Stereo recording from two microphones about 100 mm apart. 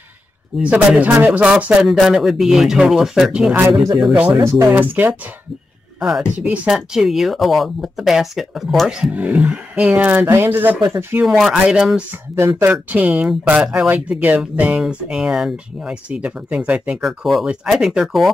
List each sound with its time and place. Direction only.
0.6 s speech: 15° right (ahead or behind)
4.4 s speech: 30° right (ahead or behind)
4.7 s speech: 20° right (ahead or behind)
5.9 s speech: 5° right (ahead or behind); by 11.2 s 25° right (ahead or behind)
11.2 s speech: 5° right (ahead or behind)
12.4 s speech: 25° right (ahead or behind)
12.9 s speech: 15° right (ahead or behind)
17.0 s speech: 5° right (ahead or behind)